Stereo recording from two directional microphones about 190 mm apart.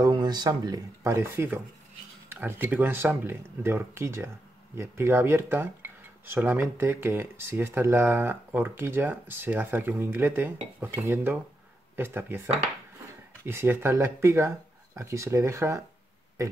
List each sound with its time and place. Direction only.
0.0 s speech: 20° right (ahead or behind)
13.5 s speech: 15° right (ahead or behind)